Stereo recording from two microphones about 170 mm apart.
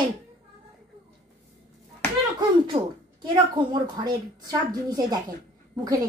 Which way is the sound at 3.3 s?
25° right (ahead or behind).